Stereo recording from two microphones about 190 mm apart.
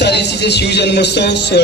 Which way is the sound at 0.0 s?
60° left (ahead or behind).